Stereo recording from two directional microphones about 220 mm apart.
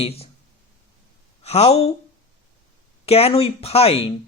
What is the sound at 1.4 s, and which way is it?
Speech, 30° left (ahead or behind).